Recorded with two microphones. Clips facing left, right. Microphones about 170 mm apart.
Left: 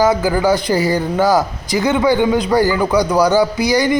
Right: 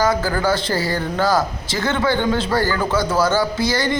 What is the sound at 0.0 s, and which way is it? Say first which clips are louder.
Speech: left 5 dB; 20° left (ahead or behind).